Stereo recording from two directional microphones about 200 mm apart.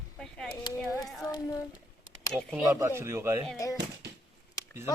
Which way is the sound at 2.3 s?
5° left (ahead or behind).